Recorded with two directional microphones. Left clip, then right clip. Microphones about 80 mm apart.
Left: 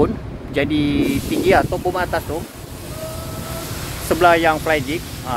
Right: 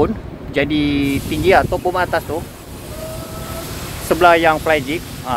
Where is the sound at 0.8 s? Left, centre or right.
Right.